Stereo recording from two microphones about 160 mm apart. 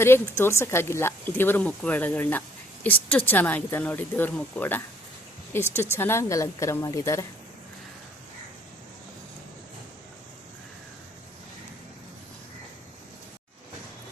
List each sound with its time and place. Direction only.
0.0 s speech: 15° left (ahead or behind)